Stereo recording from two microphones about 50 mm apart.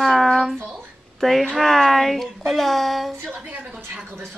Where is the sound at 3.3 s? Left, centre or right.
Right.